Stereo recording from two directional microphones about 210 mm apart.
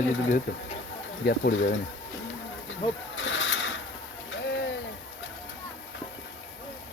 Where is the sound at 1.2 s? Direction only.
50° left (ahead or behind).